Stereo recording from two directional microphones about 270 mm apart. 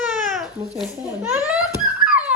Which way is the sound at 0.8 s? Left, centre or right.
Centre.